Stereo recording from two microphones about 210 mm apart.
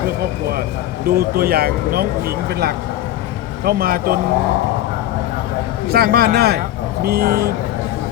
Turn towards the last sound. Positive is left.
turn(degrees=-45)  # may be behind; listen again after turning